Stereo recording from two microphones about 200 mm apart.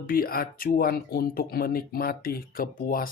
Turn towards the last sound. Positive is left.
turn(degrees=45)  # may be behind; listen again after turning